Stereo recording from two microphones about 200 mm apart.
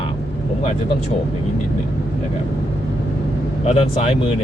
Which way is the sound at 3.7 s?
30° left (ahead or behind).